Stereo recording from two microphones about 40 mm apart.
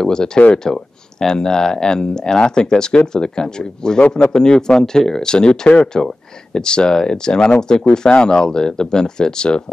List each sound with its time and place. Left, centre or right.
0.0 s speech: centre